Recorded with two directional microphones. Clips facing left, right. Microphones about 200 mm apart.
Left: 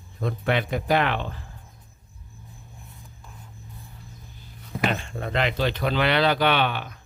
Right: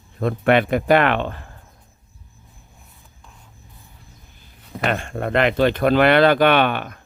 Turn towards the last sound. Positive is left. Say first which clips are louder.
# right 6 dB
turn(degrees=-55)  # may be behind; listen again after turning